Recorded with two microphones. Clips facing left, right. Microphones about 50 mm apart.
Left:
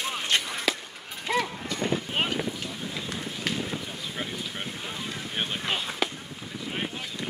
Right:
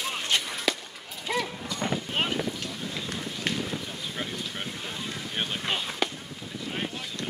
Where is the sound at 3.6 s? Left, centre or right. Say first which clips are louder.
Even; centre.